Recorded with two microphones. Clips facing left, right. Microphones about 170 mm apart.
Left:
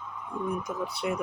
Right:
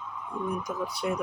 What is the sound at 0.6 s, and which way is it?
Speech, 25° left (ahead or behind).